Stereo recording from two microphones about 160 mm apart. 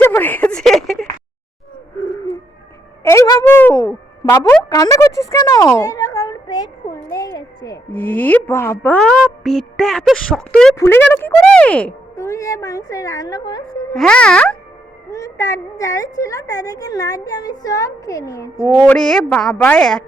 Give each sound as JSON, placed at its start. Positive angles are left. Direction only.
{"t": 0.0, "sound": "a sound", "side_deg": 10}
{"t": 3.1, "sound": "a sound", "side_deg": 20}
{"t": 7.9, "sound": "speech", "side_deg": 10}
{"t": 9.1, "sound": "speech", "side_deg": 0}
{"t": 10.8, "sound": "speech", "side_deg": 15}
{"t": 12.1, "sound": "a woman's voice", "side_deg": 20}
{"t": 13.9, "sound": "speech", "side_deg": 5}
{"t": 15.1, "sound": "a woman's voice", "side_deg": 20}
{"t": 18.8, "sound": "speech", "side_deg": 5}